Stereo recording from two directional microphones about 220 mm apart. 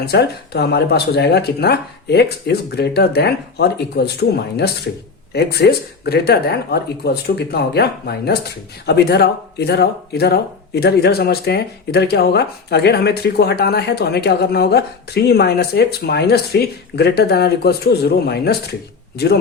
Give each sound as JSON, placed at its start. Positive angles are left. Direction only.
{"t": 0.0, "sound": "speech", "side_deg": 45}